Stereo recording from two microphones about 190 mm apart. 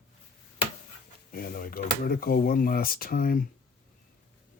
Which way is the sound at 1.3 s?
50° left (ahead or behind).